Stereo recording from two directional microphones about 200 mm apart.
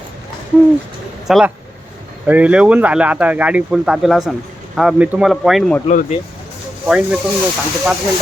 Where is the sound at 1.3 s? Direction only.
5° right (ahead or behind).